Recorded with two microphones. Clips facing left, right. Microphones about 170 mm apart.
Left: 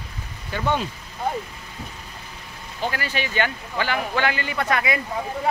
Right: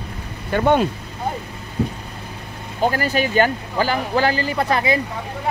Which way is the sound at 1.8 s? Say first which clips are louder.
Right 16 dB; 65° right (ahead or behind).